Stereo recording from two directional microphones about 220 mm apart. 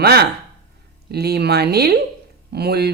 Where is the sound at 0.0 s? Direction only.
45° right (ahead or behind).